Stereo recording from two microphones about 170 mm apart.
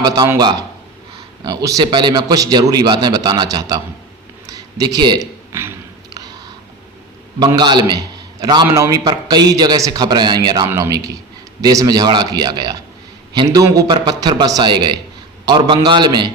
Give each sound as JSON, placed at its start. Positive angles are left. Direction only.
{"t": 0.0, "sound": "a man's voice", "side_deg": -25}
{"t": 4.4, "sound": "a sound", "side_deg": -20}
{"t": 7.3, "sound": "a man's voice", "side_deg": -25}